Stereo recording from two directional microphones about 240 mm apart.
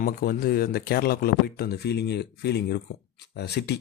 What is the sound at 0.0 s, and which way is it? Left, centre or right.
Speech, left.